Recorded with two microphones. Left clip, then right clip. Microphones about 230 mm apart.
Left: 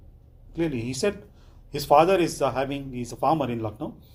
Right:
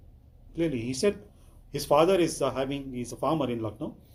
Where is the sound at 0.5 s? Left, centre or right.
Left.